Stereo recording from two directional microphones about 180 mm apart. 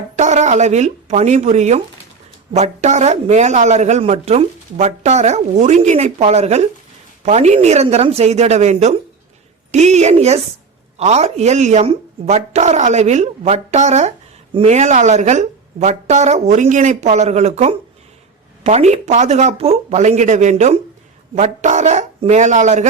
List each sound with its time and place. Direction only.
0.2 s speech: 40° right (ahead or behind)